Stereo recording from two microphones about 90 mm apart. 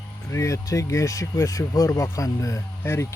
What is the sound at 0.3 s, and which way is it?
Speech, 35° left (ahead or behind).